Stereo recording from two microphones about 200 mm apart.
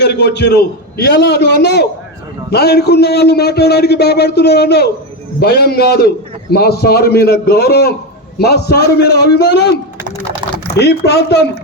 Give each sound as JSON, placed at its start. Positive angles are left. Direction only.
{"t": 0.0, "sound": "a man's voice", "side_deg": 55}
{"t": 10.8, "sound": "a man's voice", "side_deg": 55}